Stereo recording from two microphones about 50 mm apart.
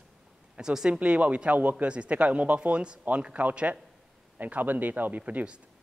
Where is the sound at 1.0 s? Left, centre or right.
Right.